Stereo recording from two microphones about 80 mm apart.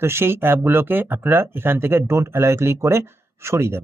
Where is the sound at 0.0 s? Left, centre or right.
Right.